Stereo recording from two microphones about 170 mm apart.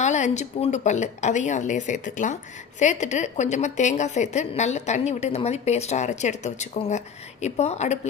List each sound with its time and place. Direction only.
0.0 s a woman's voice: 45° left (ahead or behind)